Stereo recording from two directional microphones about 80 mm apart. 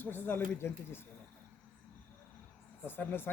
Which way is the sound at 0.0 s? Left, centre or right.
Left.